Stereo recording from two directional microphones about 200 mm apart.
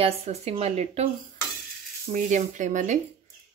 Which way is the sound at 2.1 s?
40° right (ahead or behind).